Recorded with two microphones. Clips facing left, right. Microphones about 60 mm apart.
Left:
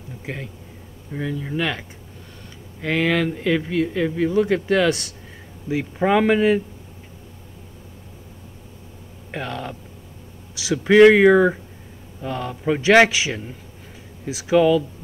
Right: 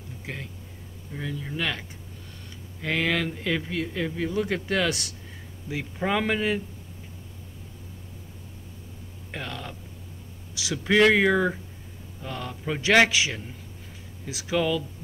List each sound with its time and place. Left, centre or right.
0.2 s speech: centre
5.7 s speech: centre
9.3 s speech: centre
10.5 s a sound: centre
10.8 s speech: centre